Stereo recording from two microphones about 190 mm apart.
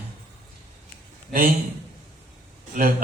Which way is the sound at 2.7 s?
45° right (ahead or behind).